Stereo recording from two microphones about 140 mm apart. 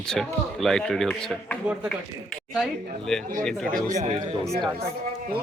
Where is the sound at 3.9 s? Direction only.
55° right (ahead or behind).